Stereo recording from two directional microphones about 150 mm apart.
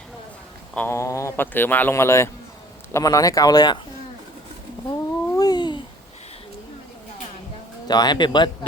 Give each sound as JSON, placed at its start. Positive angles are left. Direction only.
{"t": 0.7, "sound": "a sound", "side_deg": 10}
{"t": 0.9, "sound": "speech", "side_deg": 20}
{"t": 4.9, "sound": "babbling", "side_deg": 25}
{"t": 7.9, "sound": "speech", "side_deg": 30}